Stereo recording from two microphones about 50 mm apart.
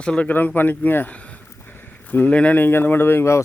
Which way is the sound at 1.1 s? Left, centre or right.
Left.